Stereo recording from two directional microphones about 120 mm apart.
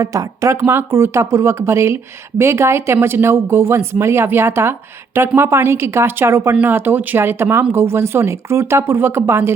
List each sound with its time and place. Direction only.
0.0 s speech: 25° right (ahead or behind)